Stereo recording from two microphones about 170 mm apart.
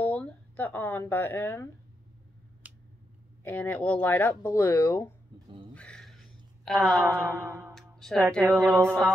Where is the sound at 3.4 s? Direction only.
10° left (ahead or behind).